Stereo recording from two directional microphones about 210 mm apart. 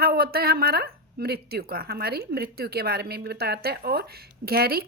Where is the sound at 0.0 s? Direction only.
45° right (ahead or behind).